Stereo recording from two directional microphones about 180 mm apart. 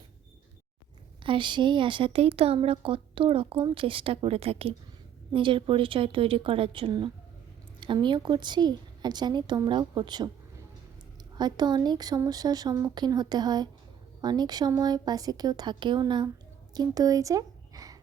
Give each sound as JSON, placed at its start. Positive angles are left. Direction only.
{"t": 1.2, "sound": "a woman's voice", "side_deg": -25}
{"t": 11.3, "sound": "a woman's voice", "side_deg": -25}